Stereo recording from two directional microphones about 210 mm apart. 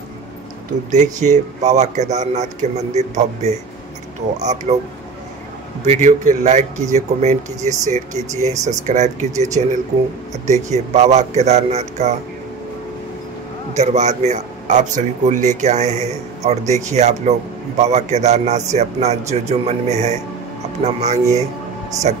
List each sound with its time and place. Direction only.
0.9 s a man's voice: 35° right (ahead or behind)
5.9 s a man's voice: 35° right (ahead or behind)
13.7 s a man's voice: 35° right (ahead or behind)